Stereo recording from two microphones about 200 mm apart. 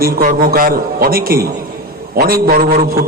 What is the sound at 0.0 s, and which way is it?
A man's voice, 45° right (ahead or behind).